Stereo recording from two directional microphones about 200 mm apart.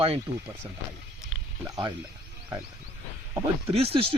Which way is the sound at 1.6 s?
20° right (ahead or behind).